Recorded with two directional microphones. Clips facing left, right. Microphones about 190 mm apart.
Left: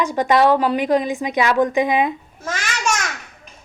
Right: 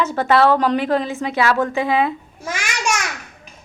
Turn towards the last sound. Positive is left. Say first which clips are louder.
# even
turn(degrees=-10)  # may be behind; listen again after turning